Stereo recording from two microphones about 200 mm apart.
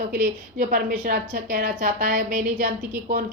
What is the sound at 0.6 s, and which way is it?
A woman's voice, 40° right (ahead or behind).